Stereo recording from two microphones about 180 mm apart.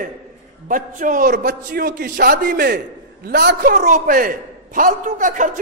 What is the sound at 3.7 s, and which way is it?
A man's voice, 45° right (ahead or behind).